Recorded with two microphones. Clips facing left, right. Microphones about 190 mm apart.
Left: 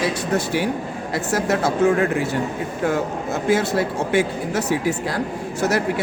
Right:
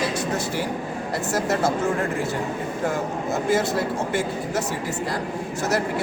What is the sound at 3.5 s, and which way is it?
A man's voice, 70° left (ahead or behind).